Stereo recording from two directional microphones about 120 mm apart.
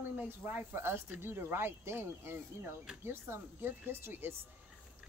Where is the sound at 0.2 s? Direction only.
15° right (ahead or behind).